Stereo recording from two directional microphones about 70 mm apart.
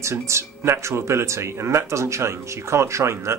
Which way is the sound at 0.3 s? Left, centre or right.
Right.